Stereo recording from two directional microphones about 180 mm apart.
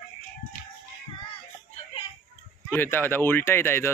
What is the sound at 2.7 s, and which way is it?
Speech, 10° left (ahead or behind).